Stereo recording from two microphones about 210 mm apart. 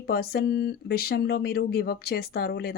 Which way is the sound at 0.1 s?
50° left (ahead or behind).